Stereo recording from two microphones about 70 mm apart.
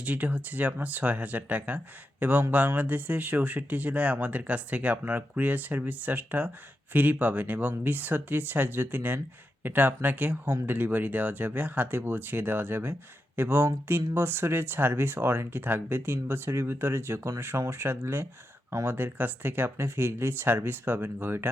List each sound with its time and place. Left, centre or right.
0.0 s speech: right